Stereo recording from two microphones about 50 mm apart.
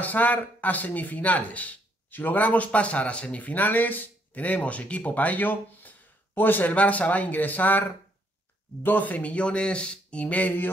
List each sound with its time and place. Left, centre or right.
0.0 s speech: left
8.8 s speech: left